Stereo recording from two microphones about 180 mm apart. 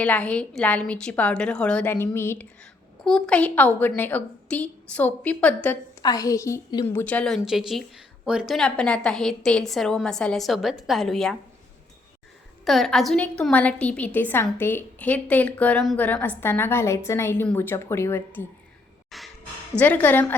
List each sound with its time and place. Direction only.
0.0 s a woman's voice: 5° left (ahead or behind)
6.0 s a woman's voice: 20° left (ahead or behind)
6.8 s speech: 10° left (ahead or behind)
12.6 s a woman's voice: centre (ahead or behind)
19.1 s a sound: centre (ahead or behind)
19.8 s a woman's voice: 10° left (ahead or behind)